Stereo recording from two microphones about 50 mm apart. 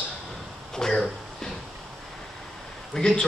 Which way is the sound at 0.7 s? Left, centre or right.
Centre.